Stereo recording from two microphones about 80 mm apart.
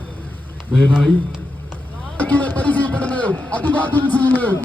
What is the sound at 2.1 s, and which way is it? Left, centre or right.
A man's voice, centre.